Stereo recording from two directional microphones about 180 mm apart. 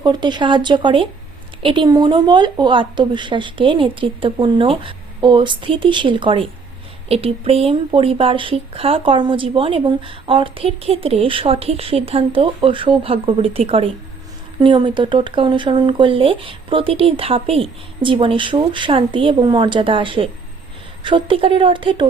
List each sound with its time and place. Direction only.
0.0 s speech: 25° right (ahead or behind)